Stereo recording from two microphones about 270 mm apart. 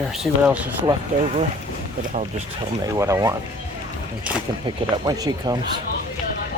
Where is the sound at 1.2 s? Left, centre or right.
Right.